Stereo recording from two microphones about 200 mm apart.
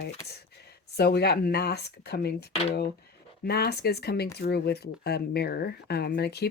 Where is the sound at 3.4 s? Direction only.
55° left (ahead or behind).